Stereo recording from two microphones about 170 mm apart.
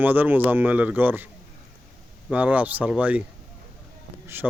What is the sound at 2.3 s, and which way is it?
Speech, 10° right (ahead or behind).